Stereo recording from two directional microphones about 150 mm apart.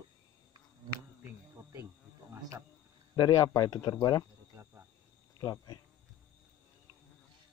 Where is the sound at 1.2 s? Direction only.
15° right (ahead or behind).